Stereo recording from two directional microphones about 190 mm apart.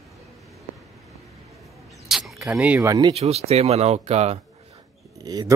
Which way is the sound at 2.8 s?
20° right (ahead or behind).